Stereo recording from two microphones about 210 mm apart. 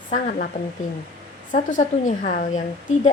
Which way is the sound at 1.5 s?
35° left (ahead or behind).